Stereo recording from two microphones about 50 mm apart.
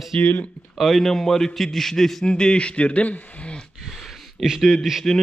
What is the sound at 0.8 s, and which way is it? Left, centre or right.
A man's voice, centre.